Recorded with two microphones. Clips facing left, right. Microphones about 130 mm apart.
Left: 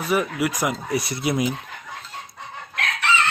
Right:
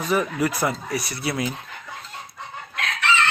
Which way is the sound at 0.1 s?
10° left (ahead or behind).